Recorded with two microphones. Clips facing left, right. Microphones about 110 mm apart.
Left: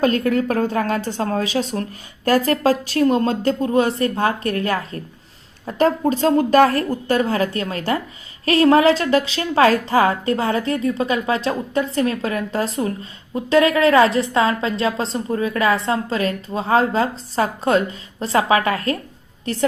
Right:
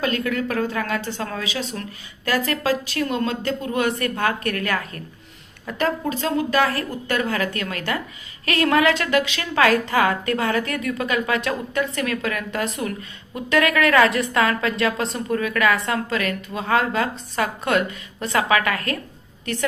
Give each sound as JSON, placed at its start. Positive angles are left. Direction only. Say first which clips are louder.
{"t": 0.0, "sound": "a woman's voice", "louder": "left 6 dB", "side_deg": 40}